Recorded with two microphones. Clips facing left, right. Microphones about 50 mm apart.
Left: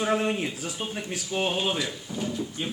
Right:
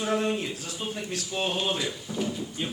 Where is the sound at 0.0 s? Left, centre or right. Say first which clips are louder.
Left 2 dB; left.